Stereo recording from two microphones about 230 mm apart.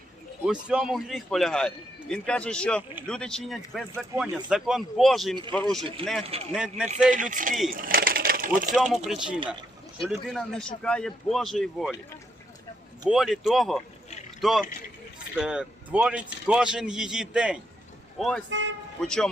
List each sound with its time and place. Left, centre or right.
0.7 s speech: centre
6.2 s speech: right
6.5 s speech: centre
7.1 s speech: right
7.7 s a sound: right
8.7 s speech: centre
13.1 s speech: centre